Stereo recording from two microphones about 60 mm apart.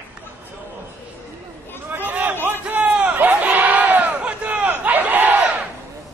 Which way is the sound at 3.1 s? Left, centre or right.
Right.